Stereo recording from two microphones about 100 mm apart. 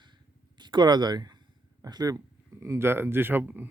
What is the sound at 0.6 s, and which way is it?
Speech, 50° right (ahead or behind).